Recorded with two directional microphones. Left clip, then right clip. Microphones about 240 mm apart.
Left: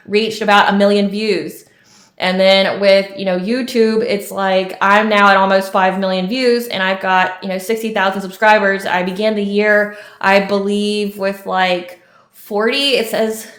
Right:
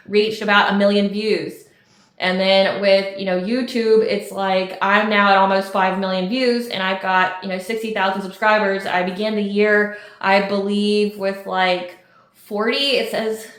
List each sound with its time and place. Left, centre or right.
0.1 s speech: left